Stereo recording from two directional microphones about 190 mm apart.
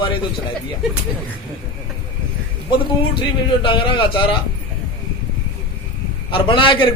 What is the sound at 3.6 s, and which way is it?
Speech, 25° left (ahead or behind).